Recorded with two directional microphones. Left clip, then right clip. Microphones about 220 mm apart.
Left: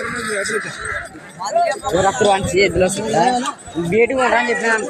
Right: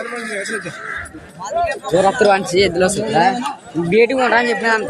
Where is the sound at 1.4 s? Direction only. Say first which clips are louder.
Left 2 dB; 15° right (ahead or behind).